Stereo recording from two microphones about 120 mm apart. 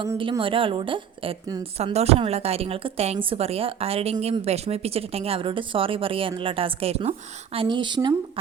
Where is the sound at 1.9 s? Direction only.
60° right (ahead or behind).